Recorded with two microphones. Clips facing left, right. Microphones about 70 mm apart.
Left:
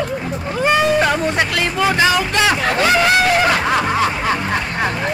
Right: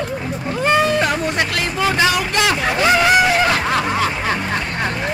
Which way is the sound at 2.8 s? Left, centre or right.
Centre.